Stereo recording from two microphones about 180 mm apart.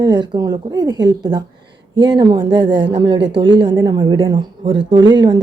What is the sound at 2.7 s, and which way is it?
Speech, 80° right.